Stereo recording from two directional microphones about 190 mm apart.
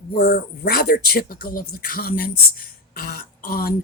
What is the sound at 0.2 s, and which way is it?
Speech, 50° left (ahead or behind).